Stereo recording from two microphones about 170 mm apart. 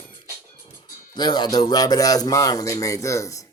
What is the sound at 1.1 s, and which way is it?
Speech, 25° left (ahead or behind).